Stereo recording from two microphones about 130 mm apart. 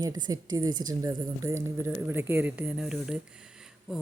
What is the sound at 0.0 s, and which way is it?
A woman's voice, 30° right (ahead or behind).